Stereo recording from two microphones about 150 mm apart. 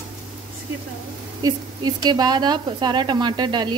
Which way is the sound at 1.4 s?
25° right (ahead or behind).